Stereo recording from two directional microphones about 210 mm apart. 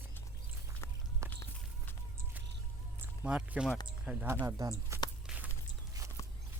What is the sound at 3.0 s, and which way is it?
Speech, 5° right (ahead or behind).